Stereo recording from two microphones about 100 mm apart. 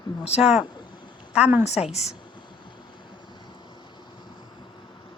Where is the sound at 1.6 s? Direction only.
90° left.